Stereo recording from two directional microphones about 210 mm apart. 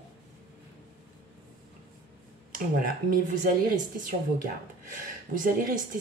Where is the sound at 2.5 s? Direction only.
45° right (ahead or behind).